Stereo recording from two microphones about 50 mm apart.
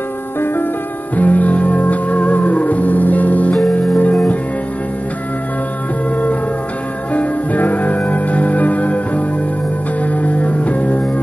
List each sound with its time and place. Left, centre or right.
1.1 s music: left
7.2 s music: left